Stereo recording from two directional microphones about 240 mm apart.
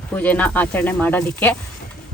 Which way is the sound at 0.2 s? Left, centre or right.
Centre.